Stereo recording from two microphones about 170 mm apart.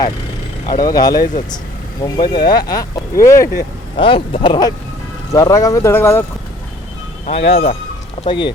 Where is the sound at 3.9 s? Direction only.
30° left (ahead or behind); by 6.2 s 15° left (ahead or behind).